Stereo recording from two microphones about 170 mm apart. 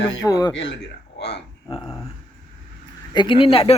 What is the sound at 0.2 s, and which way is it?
Speech, 20° left (ahead or behind).